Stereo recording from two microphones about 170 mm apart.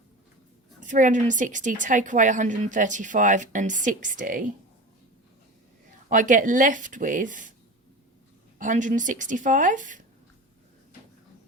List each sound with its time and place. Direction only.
0.8 s a woman's voice: 50° right (ahead or behind)
6.1 s a woman's voice: 50° right (ahead or behind)
8.5 s a woman's voice: 50° right (ahead or behind)